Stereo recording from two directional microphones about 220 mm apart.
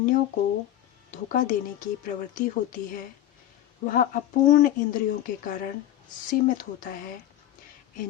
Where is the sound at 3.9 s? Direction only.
40° left (ahead or behind).